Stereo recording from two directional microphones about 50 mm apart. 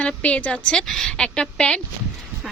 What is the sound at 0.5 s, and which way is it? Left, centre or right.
Speech, centre.